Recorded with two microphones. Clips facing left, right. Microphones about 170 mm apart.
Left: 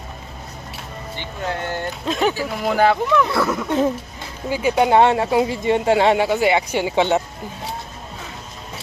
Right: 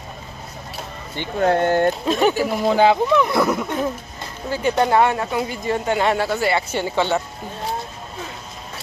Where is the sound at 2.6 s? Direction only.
20° right (ahead or behind).